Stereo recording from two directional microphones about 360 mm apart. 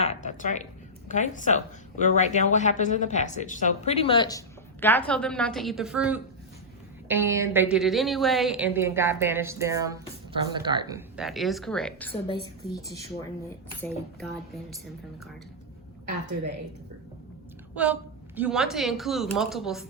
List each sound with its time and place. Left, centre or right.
0.0 s a woman's voice: centre
18.3 s a woman's voice: centre